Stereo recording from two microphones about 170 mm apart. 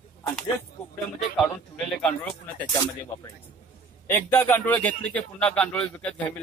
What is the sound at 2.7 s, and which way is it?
Speech, 20° left (ahead or behind).